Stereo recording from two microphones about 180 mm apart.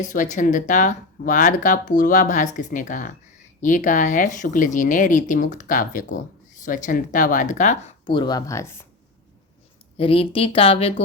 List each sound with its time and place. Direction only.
0.0 s speech: 45° left (ahead or behind)
8.0 s speech: 25° left (ahead or behind)
10.0 s speech: 30° left (ahead or behind)